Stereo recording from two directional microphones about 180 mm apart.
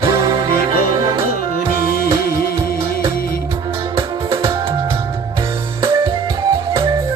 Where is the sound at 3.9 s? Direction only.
30° right (ahead or behind).